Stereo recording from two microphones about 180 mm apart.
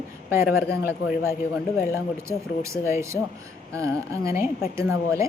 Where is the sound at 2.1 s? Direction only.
15° right (ahead or behind).